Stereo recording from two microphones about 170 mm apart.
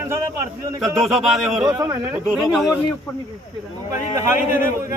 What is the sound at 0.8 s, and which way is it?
Speech, centre (ahead or behind).